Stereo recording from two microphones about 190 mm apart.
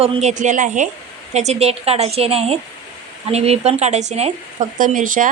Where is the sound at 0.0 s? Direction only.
35° right (ahead or behind).